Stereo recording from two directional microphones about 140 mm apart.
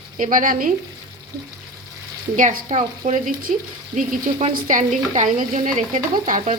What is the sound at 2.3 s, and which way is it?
A woman's voice, 65° right (ahead or behind).